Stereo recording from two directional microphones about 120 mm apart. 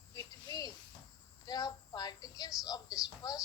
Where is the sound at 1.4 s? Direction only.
30° left (ahead or behind).